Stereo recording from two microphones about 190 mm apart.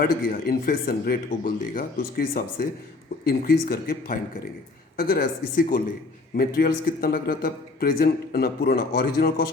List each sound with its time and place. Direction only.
0.0 s a man's voice: 50° left (ahead or behind)